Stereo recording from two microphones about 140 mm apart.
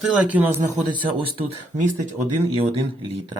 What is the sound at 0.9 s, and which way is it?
Speech, 35° right (ahead or behind).